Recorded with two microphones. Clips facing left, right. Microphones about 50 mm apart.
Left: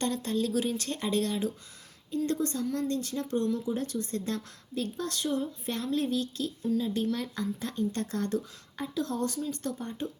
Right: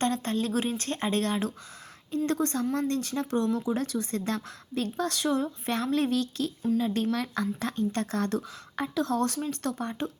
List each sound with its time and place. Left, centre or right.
0.0 s speech: right
2.1 s speech: right
3.8 s speech: right
6.6 s speech: right